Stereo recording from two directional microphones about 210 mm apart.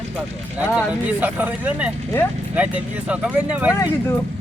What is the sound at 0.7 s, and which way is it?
Speech, 5° right (ahead or behind).